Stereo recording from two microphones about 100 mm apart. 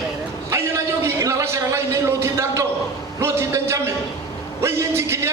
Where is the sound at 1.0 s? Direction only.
30° right (ahead or behind).